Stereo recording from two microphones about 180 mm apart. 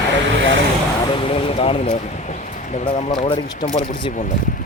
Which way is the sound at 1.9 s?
45° left (ahead or behind).